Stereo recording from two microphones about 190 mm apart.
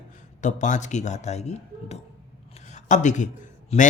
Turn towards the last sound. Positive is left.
turn(degrees=35)  # may be behind; listen again after turning